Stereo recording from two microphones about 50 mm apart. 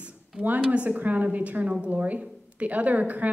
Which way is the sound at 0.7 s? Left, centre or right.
Right.